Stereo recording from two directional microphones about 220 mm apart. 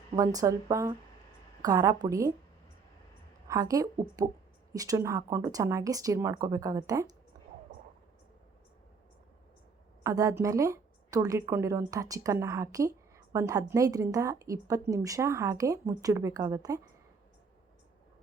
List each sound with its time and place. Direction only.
0.2 s a woman's voice: 15° right (ahead or behind)
3.5 s a woman's voice: 15° right (ahead or behind)
10.0 s a woman's voice: 15° right (ahead or behind)